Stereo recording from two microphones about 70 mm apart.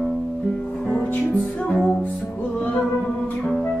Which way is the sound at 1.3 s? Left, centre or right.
Centre.